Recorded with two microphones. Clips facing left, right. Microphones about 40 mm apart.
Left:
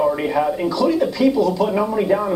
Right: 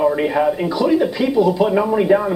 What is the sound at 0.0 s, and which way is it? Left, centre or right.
A woman's voice, centre.